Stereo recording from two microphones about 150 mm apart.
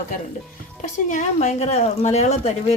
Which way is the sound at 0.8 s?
55° left (ahead or behind).